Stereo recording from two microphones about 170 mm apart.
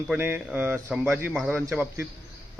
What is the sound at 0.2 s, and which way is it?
A man's voice, 10° right (ahead or behind).